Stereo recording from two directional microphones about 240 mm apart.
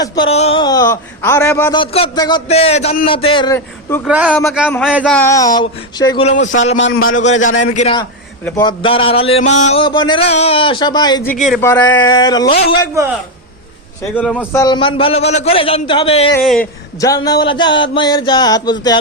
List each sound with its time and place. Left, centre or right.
0.0 s speech: left
1.8 s a man's voice: left
4.0 s speech: centre
6.4 s a man's voice: left
6.7 s a man's voice: left
8.4 s a man's voice: centre
11.3 s a man's voice: centre
14.2 s a man's voice: centre; by 16.3 s left
16.4 s speech: centre
17.0 s speech: centre